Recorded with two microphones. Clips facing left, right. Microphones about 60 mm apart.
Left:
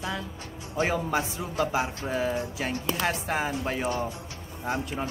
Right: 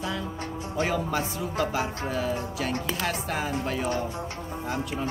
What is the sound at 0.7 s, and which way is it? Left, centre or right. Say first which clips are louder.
Speech: left 1 dB; left.